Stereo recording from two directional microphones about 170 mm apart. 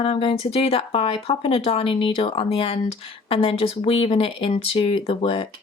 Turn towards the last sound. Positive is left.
turn(degrees=35)  # may be behind; listen again after turning